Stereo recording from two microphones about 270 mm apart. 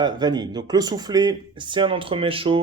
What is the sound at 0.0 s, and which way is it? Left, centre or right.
Speech, centre.